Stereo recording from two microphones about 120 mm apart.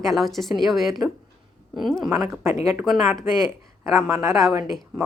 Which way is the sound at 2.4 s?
20° right (ahead or behind).